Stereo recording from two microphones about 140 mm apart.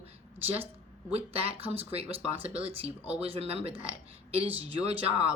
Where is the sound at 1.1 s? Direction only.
45° right (ahead or behind).